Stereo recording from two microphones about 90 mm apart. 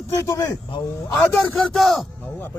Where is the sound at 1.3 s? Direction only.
5° left (ahead or behind).